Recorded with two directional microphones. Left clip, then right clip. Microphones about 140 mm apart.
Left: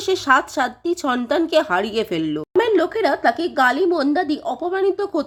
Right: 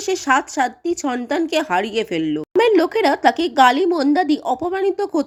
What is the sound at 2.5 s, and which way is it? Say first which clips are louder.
A woman's voice: right 3 dB; 25° right (ahead or behind).